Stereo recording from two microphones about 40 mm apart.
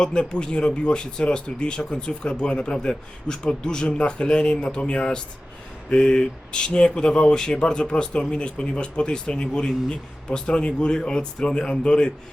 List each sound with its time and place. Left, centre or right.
0.0 s speech: left